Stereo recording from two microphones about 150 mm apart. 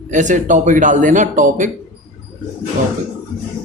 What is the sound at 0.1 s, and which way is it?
A man's voice, 55° right (ahead or behind).